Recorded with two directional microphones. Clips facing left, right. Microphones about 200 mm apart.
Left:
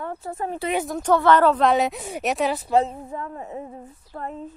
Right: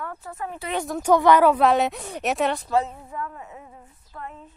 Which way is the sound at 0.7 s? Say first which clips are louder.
Right 3 dB; centre (ahead or behind).